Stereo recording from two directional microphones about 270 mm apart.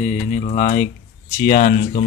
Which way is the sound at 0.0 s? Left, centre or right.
Left.